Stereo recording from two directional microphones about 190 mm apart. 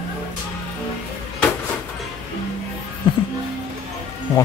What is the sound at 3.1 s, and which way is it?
Music, 25° left (ahead or behind).